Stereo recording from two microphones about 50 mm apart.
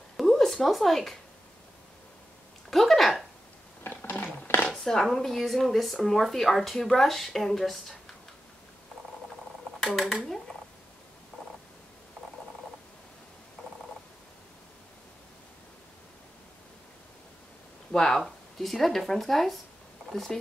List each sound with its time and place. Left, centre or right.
0.2 s speech: centre
2.7 s speech: centre
4.0 s a sound: left
4.7 s speech: centre
17.9 s speech: centre